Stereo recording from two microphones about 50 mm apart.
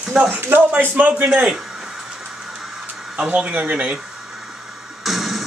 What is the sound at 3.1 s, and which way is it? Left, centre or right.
Speech, right.